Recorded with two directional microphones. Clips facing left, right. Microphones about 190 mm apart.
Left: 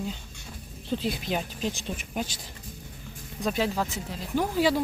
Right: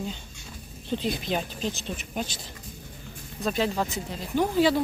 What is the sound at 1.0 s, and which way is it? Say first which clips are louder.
Speech: right 3 dB; 10° left (ahead or behind).